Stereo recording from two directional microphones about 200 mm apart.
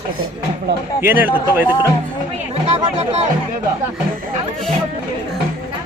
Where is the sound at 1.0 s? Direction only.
10° right (ahead or behind).